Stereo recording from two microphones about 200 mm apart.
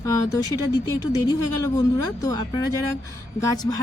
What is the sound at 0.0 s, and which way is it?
Speech, 15° left (ahead or behind).